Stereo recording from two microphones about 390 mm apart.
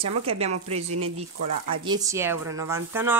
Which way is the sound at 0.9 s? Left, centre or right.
Right.